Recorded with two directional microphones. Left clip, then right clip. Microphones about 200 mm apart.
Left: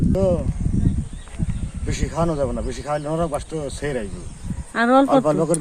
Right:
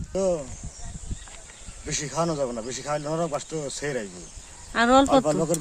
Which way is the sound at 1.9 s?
Centre (ahead or behind).